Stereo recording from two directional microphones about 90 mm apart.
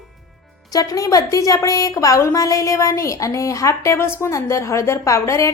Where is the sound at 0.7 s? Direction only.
40° left (ahead or behind).